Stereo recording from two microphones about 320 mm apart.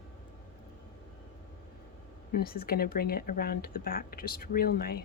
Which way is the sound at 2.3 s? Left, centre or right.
Left.